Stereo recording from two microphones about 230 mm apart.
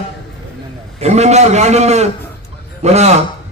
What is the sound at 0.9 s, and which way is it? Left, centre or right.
A man's voice, right.